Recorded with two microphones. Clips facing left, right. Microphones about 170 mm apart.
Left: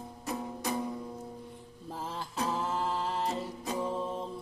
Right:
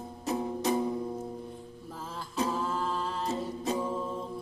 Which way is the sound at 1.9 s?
15° left (ahead or behind).